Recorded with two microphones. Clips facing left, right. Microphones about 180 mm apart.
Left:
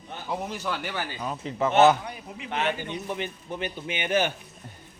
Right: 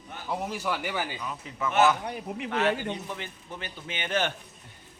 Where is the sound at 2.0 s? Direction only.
55° right (ahead or behind).